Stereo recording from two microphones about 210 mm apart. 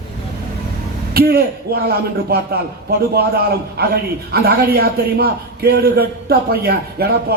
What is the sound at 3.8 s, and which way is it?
A man's voice, 45° right (ahead or behind).